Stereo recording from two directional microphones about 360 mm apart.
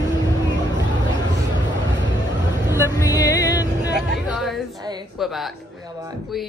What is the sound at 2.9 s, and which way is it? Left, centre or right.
Music, centre.